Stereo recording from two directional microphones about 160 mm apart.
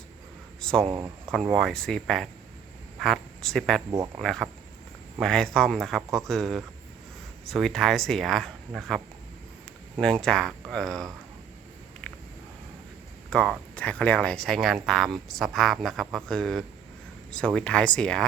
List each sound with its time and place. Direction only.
0.6 s speech: 5° left (ahead or behind)
0.9 s speech: 20° right (ahead or behind)
1.5 s speech: centre (ahead or behind)
10.0 s speech: 5° left (ahead or behind)
12.0 s a sound: 10° left (ahead or behind)
13.3 s speech: 5° left (ahead or behind)